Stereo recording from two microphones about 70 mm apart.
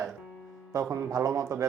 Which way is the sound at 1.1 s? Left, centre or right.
Right.